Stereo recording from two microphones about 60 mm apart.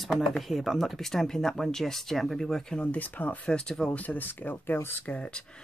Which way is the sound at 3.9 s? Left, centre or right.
Left.